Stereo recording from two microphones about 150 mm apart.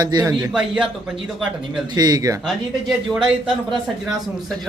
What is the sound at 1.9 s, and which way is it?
Speech, 25° right (ahead or behind).